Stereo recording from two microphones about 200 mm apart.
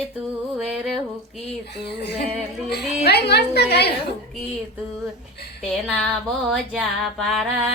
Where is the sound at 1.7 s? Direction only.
55° left (ahead or behind).